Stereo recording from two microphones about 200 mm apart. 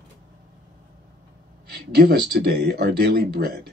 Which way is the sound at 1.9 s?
55° right (ahead or behind).